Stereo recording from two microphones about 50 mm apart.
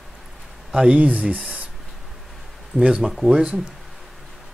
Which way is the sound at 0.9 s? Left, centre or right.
Right.